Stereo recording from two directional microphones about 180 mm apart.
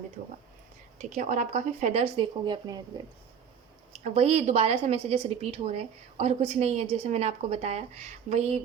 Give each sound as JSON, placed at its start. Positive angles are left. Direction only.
{"t": 0.9, "sound": "a woman's voice", "side_deg": -40}
{"t": 2.4, "sound": "speech", "side_deg": -25}
{"t": 3.9, "sound": "a woman's voice", "side_deg": -35}